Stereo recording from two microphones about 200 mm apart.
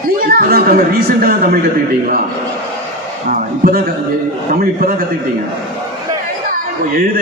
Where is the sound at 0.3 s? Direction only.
50° right (ahead or behind).